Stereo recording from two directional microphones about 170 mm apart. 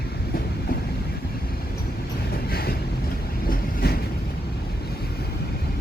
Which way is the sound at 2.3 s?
65° left (ahead or behind).